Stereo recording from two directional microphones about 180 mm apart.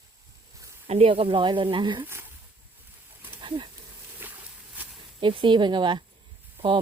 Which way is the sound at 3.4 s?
25° right (ahead or behind).